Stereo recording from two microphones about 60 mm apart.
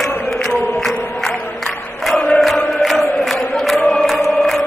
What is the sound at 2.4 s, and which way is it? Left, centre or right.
Chant, centre.